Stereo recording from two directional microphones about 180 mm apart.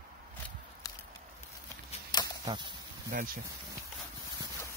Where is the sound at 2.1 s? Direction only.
25° left (ahead or behind).